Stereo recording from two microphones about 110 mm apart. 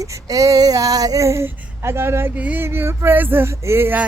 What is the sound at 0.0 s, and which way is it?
Female singing, 30° right (ahead or behind).